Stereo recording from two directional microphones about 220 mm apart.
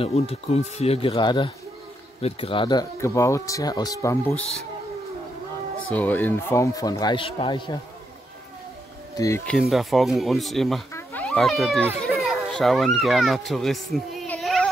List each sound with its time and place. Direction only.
0.0 s speech: 30° left (ahead or behind)
5.9 s speech: 5° left (ahead or behind)
9.1 s speech: 15° left (ahead or behind)
9.5 s speech: centre (ahead or behind)